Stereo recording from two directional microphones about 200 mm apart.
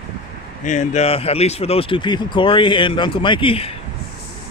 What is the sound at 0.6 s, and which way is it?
Speech, 35° left (ahead or behind).